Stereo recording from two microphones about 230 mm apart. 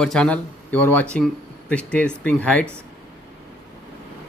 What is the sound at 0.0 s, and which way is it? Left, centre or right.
Speech, centre.